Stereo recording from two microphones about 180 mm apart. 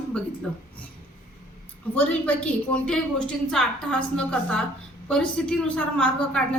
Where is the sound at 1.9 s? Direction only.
10° left (ahead or behind).